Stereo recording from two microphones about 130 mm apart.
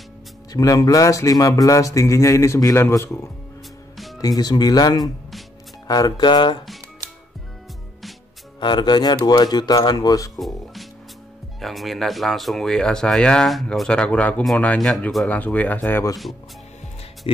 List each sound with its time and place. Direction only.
0.5 s speech: 30° left (ahead or behind)
8.5 s speech: 35° left (ahead or behind)
10.4 s speech: centre (ahead or behind)